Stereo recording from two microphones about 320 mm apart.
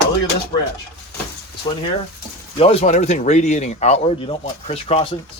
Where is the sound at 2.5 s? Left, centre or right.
Centre.